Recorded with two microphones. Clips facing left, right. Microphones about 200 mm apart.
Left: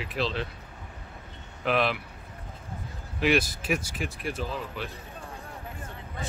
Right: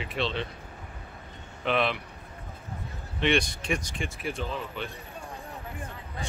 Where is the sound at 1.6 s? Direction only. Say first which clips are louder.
Left 1 dB; centre (ahead or behind).